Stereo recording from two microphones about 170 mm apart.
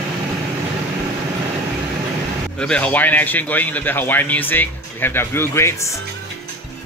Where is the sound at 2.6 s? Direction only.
5° left (ahead or behind).